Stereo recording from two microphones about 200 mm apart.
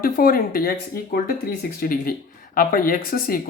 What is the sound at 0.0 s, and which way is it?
Speech, 45° left (ahead or behind).